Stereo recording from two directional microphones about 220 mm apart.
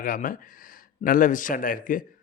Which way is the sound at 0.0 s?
40° left (ahead or behind).